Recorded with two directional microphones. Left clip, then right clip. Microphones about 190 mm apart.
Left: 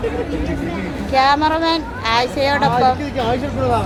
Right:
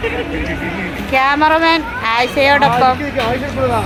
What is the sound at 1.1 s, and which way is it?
Speech, 25° right (ahead or behind).